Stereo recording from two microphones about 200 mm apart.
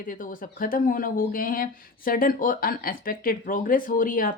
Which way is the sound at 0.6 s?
45° left (ahead or behind).